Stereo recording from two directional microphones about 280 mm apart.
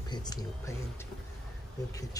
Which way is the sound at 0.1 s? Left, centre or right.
Centre.